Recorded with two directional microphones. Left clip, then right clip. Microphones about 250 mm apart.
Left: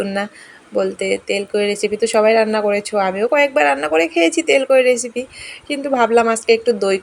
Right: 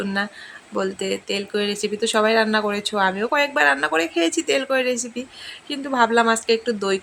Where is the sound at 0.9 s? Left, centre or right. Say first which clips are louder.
Left 6 dB; right.